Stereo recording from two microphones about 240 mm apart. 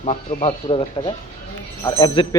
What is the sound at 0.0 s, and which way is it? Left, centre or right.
Speech, left.